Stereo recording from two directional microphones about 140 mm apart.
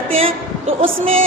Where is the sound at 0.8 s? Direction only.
45° right (ahead or behind).